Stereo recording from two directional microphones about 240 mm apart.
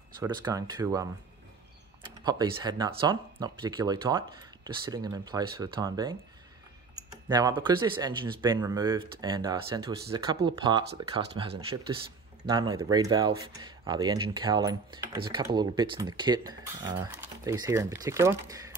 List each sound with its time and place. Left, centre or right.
0.2 s speech: centre
2.2 s speech: centre
7.2 s speech: centre